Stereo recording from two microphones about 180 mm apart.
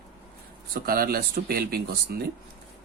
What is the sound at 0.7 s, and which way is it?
Speech, 55° right (ahead or behind).